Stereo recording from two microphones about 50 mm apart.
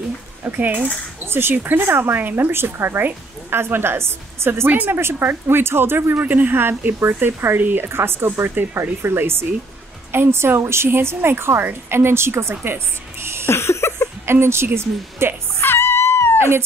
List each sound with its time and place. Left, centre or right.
0.4 s a woman's voice: right
5.5 s a woman's voice: right
13.5 s a sound: left
14.2 s a woman's voice: right
15.6 s music: left